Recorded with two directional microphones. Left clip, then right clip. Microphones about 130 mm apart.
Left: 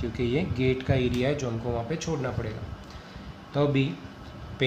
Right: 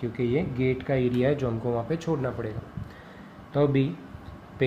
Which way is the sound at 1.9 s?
70° right (ahead or behind).